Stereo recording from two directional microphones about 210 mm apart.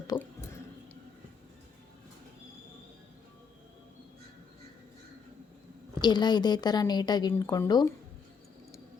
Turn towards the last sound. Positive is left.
turn(degrees=15)  # may be behind; listen again after turning